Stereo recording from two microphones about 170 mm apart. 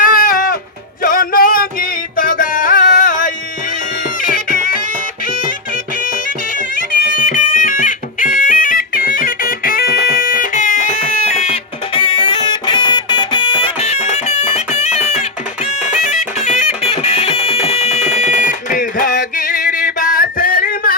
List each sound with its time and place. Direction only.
0.0 s goat: 55° left (ahead or behind)
1.0 s music: 55° left (ahead or behind)
7.1 s music: 50° left (ahead or behind); by 10.2 s 70° left (ahead or behind)
10.3 s music: 50° left (ahead or behind)